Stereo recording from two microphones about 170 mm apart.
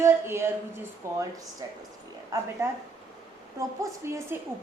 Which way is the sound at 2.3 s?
20° right (ahead or behind).